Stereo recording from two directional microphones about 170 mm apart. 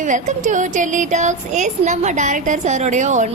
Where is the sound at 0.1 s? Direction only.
50° right (ahead or behind).